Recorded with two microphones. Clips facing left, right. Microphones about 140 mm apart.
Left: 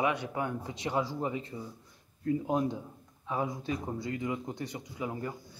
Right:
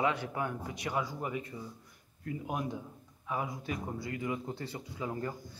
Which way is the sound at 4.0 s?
20° left (ahead or behind).